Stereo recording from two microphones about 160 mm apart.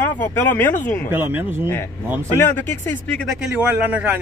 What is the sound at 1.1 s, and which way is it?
Speech, 10° right (ahead or behind).